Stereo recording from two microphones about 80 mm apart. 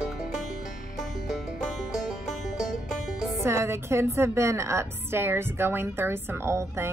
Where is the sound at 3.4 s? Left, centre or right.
Right.